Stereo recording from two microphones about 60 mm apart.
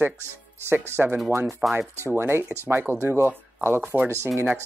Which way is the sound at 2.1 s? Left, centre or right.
Right.